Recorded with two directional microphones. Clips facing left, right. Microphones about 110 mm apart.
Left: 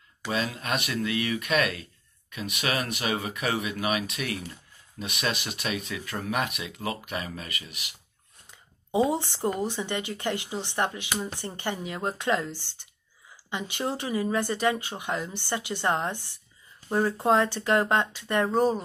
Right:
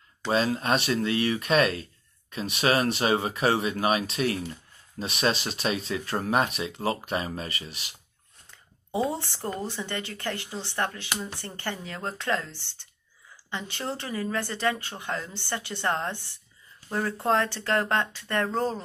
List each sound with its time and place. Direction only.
0.3 s speech: 35° right (ahead or behind)
8.5 s speech: 15° left (ahead or behind)